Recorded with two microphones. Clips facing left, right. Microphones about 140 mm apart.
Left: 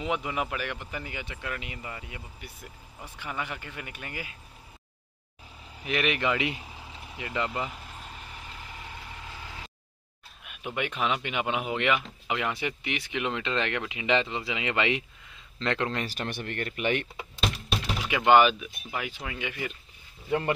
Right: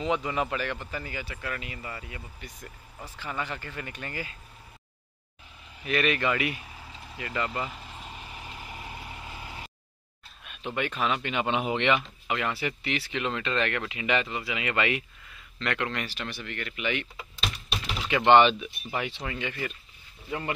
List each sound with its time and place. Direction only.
0.0 s speech: 10° left (ahead or behind)
5.9 s speech: 15° left (ahead or behind)
8.1 s vehicle: 15° right (ahead or behind)
10.4 s speech: 15° left (ahead or behind)
12.3 s speech: 15° left (ahead or behind)
16.1 s speech: 50° left (ahead or behind)
18.0 s speech: 10° left (ahead or behind)
20.2 s speech: 45° left (ahead or behind)